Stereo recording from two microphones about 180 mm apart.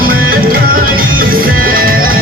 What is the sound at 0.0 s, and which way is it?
Music, 55° right (ahead or behind).